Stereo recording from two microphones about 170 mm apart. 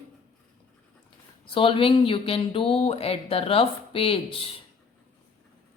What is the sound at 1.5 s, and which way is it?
Speech, 30° left (ahead or behind).